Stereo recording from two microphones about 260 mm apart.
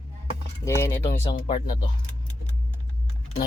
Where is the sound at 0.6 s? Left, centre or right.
Centre.